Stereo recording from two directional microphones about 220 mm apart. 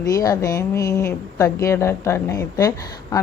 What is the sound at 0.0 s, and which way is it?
A woman's voice, 15° left (ahead or behind).